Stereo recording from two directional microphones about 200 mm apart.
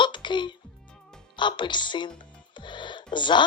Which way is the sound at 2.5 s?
25° left (ahead or behind).